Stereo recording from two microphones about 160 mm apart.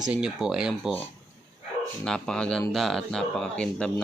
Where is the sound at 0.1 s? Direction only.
5° right (ahead or behind).